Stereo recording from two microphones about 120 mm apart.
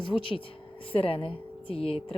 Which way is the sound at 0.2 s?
45° left (ahead or behind).